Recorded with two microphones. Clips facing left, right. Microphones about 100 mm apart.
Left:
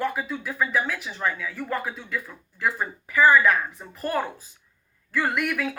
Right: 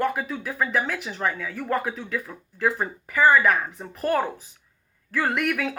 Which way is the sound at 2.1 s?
15° right (ahead or behind).